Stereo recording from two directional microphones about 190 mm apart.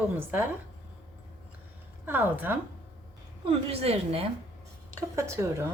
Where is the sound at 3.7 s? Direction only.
30° right (ahead or behind).